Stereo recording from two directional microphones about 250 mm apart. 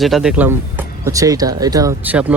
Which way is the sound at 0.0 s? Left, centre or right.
Centre.